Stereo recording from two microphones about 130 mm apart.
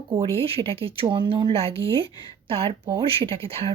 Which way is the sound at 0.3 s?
45° right (ahead or behind).